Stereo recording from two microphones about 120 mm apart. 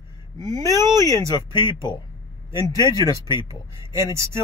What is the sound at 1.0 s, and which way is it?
Speech, 30° left (ahead or behind).